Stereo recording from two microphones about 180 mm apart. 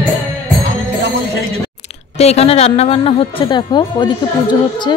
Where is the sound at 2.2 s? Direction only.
35° left (ahead or behind).